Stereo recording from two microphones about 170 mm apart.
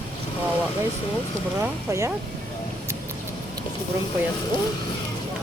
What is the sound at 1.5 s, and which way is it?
Speech, 15° right (ahead or behind).